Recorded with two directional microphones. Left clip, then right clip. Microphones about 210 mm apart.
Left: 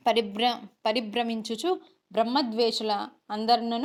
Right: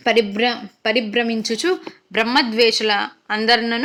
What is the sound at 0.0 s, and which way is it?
Speech, 30° left (ahead or behind).